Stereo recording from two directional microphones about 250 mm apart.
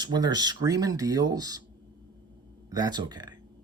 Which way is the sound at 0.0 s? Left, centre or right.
Centre.